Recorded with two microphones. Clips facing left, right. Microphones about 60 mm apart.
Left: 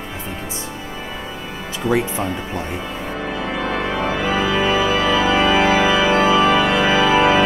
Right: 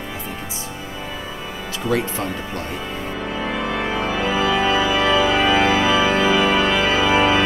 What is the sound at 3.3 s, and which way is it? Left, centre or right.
Organ, centre.